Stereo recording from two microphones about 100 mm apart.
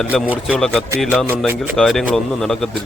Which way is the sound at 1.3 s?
20° right (ahead or behind).